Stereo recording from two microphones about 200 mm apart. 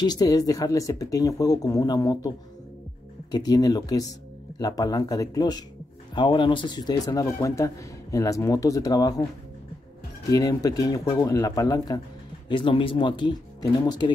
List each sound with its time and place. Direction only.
0.0 s speech: 20° left (ahead or behind)
10.3 s speech: 20° left (ahead or behind)